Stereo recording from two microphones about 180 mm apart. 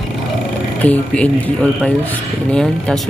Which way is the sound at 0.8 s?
10° left (ahead or behind).